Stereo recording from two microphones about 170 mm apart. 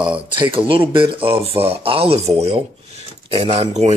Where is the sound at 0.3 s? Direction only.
30° right (ahead or behind).